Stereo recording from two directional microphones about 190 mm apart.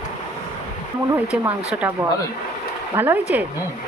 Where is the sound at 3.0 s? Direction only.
10° right (ahead or behind).